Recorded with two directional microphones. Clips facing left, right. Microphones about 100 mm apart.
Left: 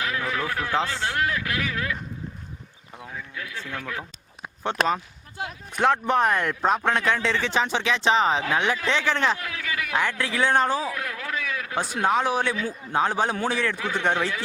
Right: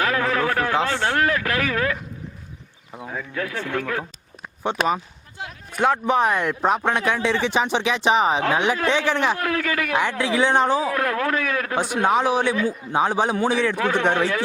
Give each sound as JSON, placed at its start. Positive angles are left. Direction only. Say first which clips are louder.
{"t": 0.0, "sound": "speech", "louder": "right 6 dB", "side_deg": -65}
{"t": 3.1, "sound": "speech", "louder": "right 8 dB", "side_deg": -60}
{"t": 4.8, "sound": "speech", "louder": "even", "side_deg": 0}
{"t": 9.4, "sound": "speech", "louder": "right 8 dB", "side_deg": -55}
{"t": 9.9, "sound": "speech", "louder": "right 3 dB", "side_deg": -15}
{"t": 10.8, "sound": "speech", "louder": "right 9 dB", "side_deg": -55}
{"t": 12.0, "sound": "speech", "louder": "right 3 dB", "side_deg": -10}
{"t": 13.7, "sound": "speech", "louder": "right 5 dB", "side_deg": -60}